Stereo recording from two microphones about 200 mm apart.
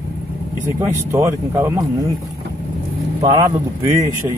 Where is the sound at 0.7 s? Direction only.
15° right (ahead or behind).